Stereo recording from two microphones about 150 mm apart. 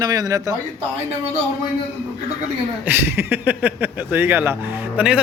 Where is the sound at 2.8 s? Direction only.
15° right (ahead or behind).